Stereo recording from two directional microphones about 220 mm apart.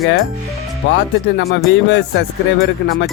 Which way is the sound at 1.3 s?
45° left (ahead or behind).